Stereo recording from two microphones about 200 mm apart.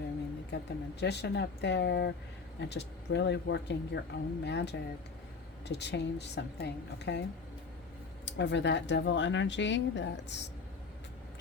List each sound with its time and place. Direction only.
0.5 s speech: 55° left (ahead or behind)
8.2 s speech: 60° left (ahead or behind)